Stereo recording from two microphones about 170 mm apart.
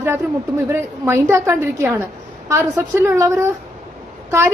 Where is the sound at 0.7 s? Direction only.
15° right (ahead or behind).